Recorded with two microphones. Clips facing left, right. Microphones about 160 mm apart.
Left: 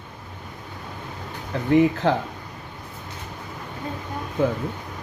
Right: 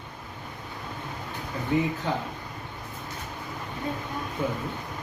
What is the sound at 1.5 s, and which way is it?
Speech, 80° left.